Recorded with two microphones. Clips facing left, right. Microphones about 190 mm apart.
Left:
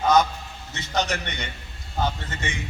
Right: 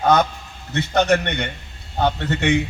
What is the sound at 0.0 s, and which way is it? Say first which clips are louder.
A man's voice: right 2 dB; 60° right (ahead or behind).